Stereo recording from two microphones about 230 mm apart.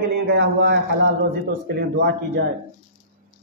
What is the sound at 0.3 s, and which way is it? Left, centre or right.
A man's voice, right.